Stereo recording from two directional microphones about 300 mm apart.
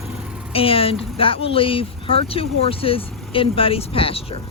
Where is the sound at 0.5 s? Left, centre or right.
Centre.